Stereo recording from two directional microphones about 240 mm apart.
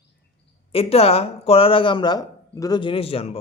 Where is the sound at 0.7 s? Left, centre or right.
Left.